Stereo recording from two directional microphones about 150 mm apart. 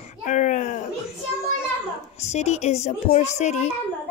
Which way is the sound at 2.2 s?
50° left (ahead or behind).